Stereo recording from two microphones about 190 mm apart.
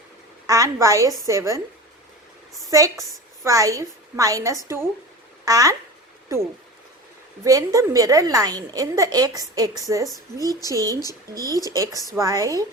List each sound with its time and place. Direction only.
0.4 s a woman's voice: 20° right (ahead or behind)
2.6 s a woman's voice: 15° right (ahead or behind)
11.4 s speech: 15° left (ahead or behind)
11.7 s a woman's voice: 15° right (ahead or behind)